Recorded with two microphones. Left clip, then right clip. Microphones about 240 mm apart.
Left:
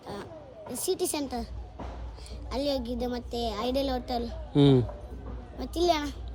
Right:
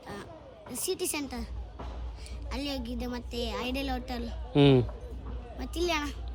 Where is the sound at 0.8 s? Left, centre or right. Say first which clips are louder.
Left 3 dB; centre.